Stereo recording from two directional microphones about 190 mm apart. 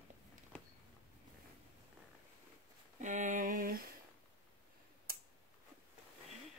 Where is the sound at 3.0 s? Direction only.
40° right (ahead or behind).